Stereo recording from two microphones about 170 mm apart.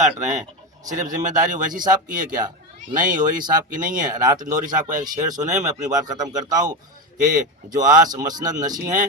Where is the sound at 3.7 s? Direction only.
50° right (ahead or behind).